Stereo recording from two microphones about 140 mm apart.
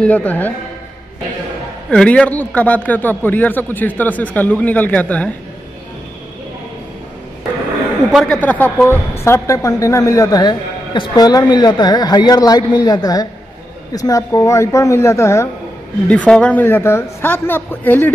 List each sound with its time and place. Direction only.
0.0 s a man's voice: 10° left (ahead or behind)
1.9 s a man's voice: 10° left (ahead or behind)
8.1 s speech: centre (ahead or behind)
8.4 s a woman's voice: 10° left (ahead or behind)
16.1 s a man's voice: 10° left (ahead or behind)